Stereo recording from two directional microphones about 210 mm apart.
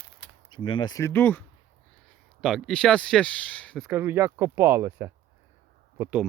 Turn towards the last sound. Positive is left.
turn(degrees=-10)  # may be behind; listen again after turning